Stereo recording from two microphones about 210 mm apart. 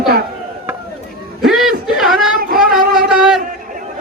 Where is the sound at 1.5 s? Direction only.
Centre (ahead or behind).